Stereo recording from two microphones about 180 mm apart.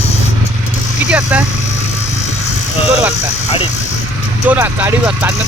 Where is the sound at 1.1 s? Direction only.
10° right (ahead or behind).